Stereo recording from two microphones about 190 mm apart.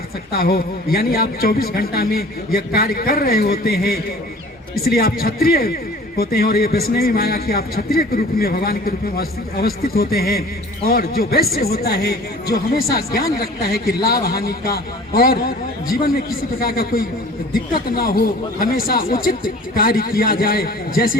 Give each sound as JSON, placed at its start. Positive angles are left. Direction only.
{"t": 0.3, "sound": "a man's voice", "side_deg": 55}